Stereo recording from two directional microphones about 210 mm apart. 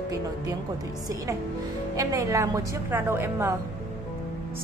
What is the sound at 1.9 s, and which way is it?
A woman's voice, 15° right (ahead or behind).